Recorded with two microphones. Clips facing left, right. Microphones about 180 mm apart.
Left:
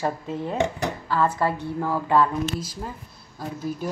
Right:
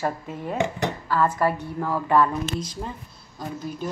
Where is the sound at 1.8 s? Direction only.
10° left (ahead or behind).